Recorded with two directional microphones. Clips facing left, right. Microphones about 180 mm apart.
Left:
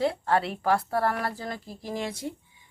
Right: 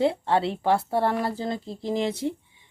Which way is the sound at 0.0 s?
25° right (ahead or behind).